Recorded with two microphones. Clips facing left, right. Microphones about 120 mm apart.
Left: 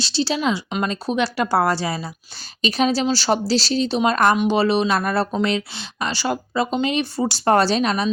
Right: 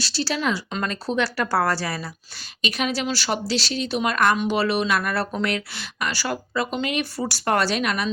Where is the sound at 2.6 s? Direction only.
30° left (ahead or behind).